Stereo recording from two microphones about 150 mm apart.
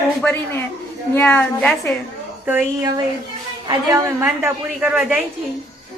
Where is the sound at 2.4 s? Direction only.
15° right (ahead or behind).